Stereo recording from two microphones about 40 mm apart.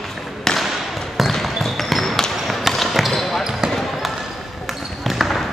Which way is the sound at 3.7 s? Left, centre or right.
Centre.